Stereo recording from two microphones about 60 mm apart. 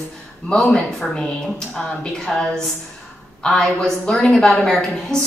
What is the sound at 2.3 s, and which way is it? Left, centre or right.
A woman's voice, centre.